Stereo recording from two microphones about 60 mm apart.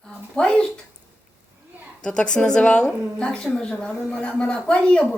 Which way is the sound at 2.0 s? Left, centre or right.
Centre.